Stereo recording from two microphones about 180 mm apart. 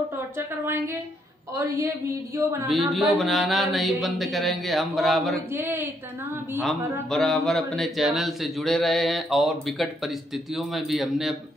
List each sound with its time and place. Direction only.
0.4 s a woman's voice: 10° right (ahead or behind)
2.7 s speech: centre (ahead or behind)
5.5 s a woman's voice: 15° right (ahead or behind)
7.1 s speech: centre (ahead or behind)